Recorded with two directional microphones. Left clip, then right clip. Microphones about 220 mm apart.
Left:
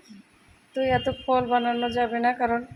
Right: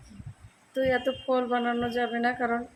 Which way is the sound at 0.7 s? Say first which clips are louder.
Left 2 dB; centre (ahead or behind).